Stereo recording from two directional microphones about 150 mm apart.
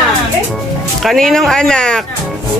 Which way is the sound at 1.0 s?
5° left (ahead or behind).